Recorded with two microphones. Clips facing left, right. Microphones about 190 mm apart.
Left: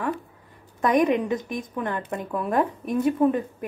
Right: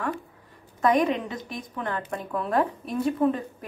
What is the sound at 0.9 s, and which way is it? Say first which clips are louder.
A woman's voice: left 4 dB; 15° left (ahead or behind).